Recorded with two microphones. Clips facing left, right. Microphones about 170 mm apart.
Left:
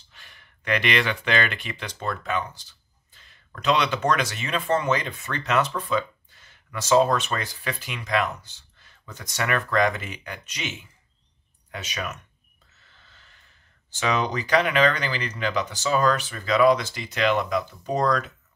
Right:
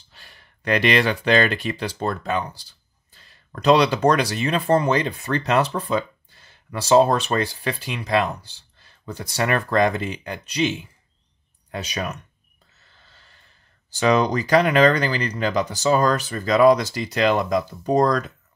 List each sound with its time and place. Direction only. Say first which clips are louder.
0.1 s speech: right 3 dB; 35° right (ahead or behind)
13.1 s a sound: right 3 dB; 35° right (ahead or behind)
13.8 s speech: right 6 dB; 40° right (ahead or behind)